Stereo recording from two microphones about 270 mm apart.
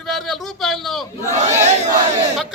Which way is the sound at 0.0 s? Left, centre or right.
Centre.